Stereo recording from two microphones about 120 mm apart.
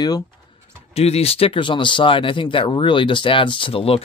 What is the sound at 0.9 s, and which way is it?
Speech, 60° left (ahead or behind).